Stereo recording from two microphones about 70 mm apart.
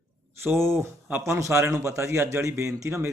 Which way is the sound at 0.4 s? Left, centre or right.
Right.